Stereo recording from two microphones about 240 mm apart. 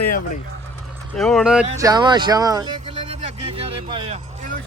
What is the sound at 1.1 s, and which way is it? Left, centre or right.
Speech, centre.